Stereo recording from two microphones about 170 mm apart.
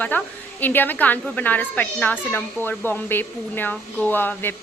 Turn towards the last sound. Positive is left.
turn(degrees=10)  # may be behind; listen again after turning